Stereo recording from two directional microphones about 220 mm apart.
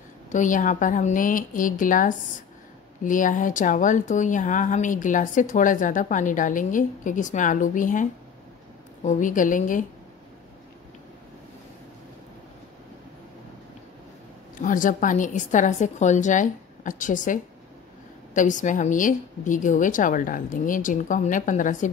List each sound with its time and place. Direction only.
0.3 s a woman's voice: 35° left (ahead or behind)
14.6 s a woman's voice: 35° left (ahead or behind)